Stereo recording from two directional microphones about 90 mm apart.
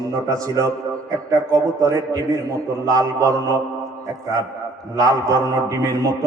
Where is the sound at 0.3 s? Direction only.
40° right (ahead or behind).